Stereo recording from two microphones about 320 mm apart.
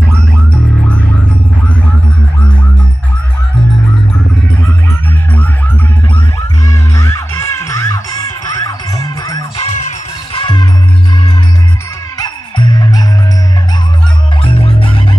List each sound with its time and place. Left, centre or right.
6.1 s music: centre
12.2 s music: centre
14.5 s music: centre